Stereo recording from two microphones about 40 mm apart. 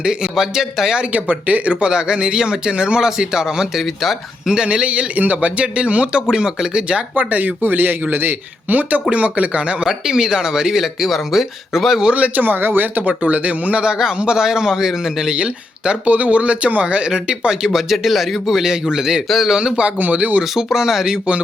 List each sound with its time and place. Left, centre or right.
0.0 s speech: right
0.3 s speech: centre
1.1 s speech: right; by 4.2 s centre
4.4 s speech: right
7.2 s speech: right
10.1 s speech: centre
12.1 s speech: right
13.8 s speech: right
15.4 s speech: right
16.1 s speech: right
20.1 s speech: right
20.4 s speech: centre